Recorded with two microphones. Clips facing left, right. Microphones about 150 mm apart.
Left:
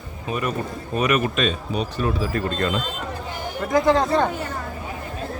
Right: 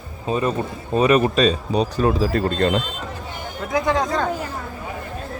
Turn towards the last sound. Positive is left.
turn(degrees=5)  # may be behind; listen again after turning